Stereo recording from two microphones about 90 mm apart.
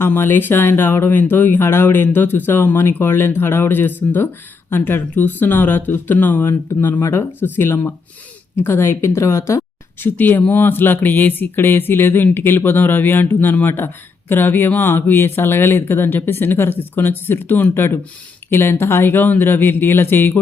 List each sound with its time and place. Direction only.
0.0 s speech: 25° left (ahead or behind)